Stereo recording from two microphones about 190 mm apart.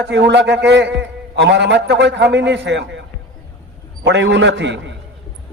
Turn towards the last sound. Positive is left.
turn(degrees=-70)  # may be behind; listen again after turning